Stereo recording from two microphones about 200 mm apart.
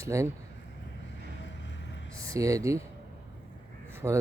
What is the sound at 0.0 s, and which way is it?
Speech, 15° right (ahead or behind).